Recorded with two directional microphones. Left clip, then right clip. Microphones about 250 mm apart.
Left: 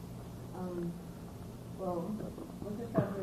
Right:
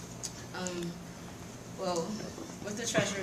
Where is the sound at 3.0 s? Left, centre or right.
Right.